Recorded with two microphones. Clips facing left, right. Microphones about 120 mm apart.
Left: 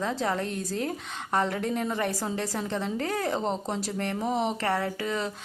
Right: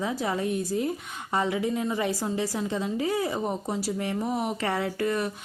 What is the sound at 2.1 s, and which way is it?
Speech, 15° right (ahead or behind).